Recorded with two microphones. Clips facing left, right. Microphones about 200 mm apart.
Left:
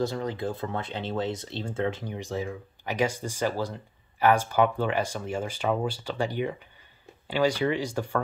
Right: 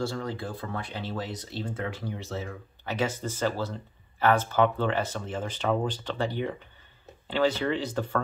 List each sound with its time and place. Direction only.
0.0 s speech: 20° left (ahead or behind)